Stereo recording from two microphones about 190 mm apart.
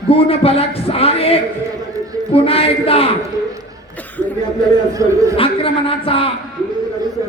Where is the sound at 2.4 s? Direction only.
30° left (ahead or behind).